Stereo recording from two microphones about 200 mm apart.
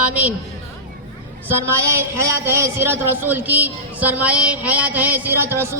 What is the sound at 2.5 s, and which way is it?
A woman's voice, 10° right (ahead or behind).